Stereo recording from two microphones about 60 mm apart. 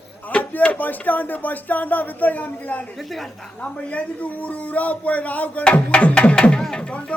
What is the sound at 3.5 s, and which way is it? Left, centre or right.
A man's voice, left.